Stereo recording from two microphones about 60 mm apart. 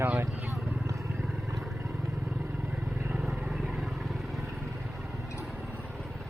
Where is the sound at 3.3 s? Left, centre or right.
Centre.